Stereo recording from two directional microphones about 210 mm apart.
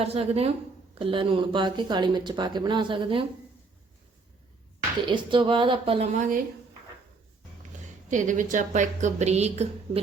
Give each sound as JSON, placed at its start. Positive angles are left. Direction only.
{"t": 0.0, "sound": "speech", "side_deg": -30}
{"t": 5.1, "sound": "speech", "side_deg": -25}
{"t": 8.1, "sound": "a woman's voice", "side_deg": -35}